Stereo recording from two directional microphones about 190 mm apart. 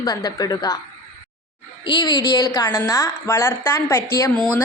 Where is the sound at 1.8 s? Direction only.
20° left (ahead or behind).